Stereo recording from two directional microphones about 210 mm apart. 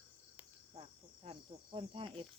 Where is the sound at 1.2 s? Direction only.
25° right (ahead or behind).